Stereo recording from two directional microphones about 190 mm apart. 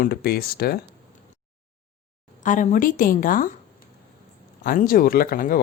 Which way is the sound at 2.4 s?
40° left (ahead or behind).